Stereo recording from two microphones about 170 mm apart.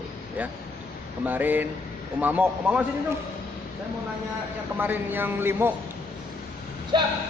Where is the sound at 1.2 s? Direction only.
10° right (ahead or behind).